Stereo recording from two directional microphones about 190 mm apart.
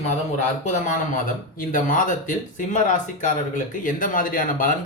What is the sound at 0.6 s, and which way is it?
Speech, 40° left (ahead or behind).